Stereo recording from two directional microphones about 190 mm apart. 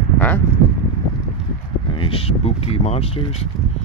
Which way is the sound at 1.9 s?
30° left (ahead or behind).